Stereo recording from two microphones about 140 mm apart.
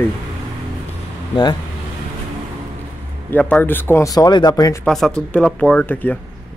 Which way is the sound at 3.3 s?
10° left (ahead or behind).